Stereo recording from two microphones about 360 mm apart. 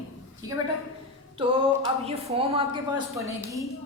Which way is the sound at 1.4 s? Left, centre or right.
Centre.